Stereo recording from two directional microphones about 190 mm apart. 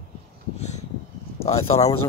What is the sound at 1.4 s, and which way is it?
Speech, 35° left (ahead or behind).